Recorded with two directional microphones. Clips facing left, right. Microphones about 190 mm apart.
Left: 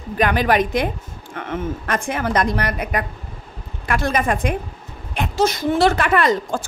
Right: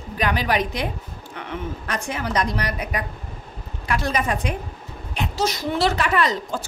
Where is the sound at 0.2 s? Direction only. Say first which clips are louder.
Left 5 dB; 50° left (ahead or behind).